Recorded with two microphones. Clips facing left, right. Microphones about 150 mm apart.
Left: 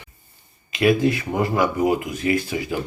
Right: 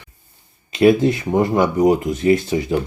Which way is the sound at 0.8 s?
25° right (ahead or behind).